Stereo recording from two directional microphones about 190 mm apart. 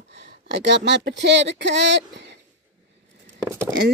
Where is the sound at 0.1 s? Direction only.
70° right (ahead or behind).